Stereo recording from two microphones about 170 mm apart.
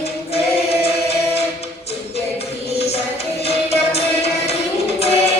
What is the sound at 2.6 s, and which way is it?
Music, 35° left (ahead or behind).